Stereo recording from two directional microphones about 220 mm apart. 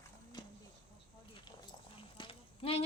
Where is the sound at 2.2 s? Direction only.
25° left (ahead or behind).